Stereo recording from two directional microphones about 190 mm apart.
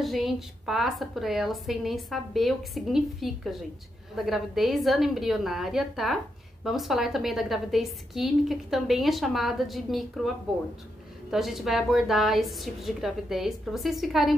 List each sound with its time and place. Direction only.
0.0 s a woman's voice: centre (ahead or behind)